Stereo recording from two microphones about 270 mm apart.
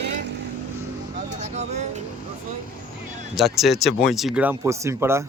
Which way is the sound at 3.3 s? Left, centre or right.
Centre.